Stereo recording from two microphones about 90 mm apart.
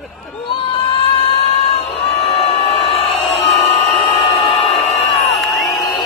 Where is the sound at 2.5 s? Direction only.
Centre (ahead or behind).